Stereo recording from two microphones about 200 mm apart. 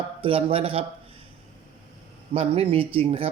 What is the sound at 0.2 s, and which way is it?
Speech, 25° right (ahead or behind).